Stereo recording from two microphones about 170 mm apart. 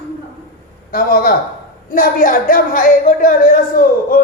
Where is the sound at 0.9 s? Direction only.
60° left (ahead or behind).